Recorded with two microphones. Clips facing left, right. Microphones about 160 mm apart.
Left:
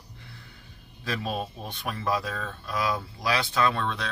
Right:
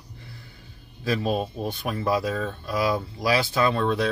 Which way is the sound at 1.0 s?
Centre (ahead or behind).